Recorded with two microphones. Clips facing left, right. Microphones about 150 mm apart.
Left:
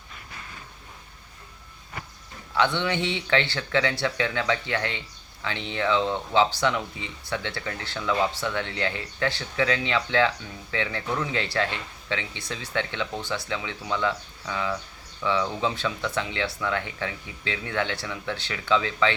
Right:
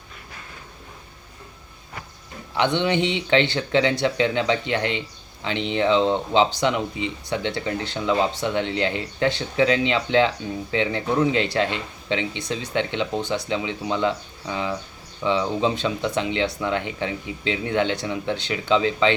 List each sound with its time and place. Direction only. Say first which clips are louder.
2.6 s speech: right 4 dB; 20° right (ahead or behind)